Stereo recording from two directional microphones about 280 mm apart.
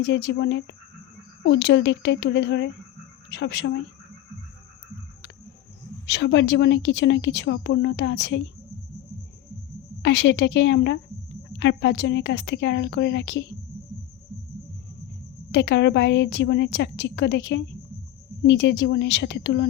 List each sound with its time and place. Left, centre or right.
0.0 s a woman's voice: left
6.1 s a woman's voice: left
10.0 s a woman's voice: left
15.5 s a woman's voice: left